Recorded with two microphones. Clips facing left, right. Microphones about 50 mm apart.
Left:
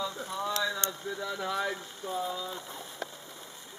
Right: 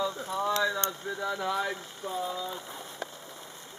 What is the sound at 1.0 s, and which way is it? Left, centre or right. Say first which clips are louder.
Speech: right 1 dB; right.